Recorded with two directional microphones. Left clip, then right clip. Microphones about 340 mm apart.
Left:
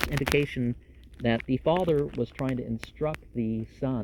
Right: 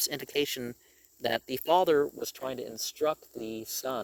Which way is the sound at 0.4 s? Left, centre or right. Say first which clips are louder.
Left 2 dB; right.